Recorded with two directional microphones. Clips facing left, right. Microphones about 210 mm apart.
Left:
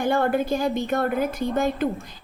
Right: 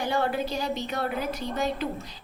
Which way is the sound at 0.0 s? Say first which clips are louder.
Left 5 dB; 50° left (ahead or behind).